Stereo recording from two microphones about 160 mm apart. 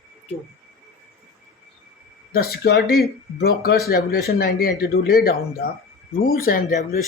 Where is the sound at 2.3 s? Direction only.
80° left.